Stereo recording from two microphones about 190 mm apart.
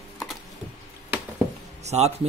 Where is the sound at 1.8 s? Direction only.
35° right (ahead or behind).